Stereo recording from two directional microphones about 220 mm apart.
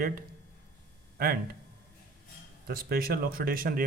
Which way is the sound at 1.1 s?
45° right (ahead or behind).